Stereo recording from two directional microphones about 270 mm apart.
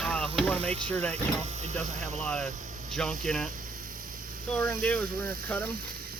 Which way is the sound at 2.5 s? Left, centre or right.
Right.